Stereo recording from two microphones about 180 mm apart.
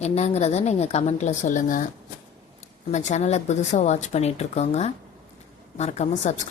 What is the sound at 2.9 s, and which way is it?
Speech, 40° left (ahead or behind).